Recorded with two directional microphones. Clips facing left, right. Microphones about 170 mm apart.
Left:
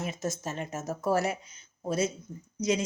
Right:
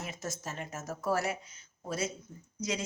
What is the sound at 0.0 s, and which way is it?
Speech, 20° left (ahead or behind).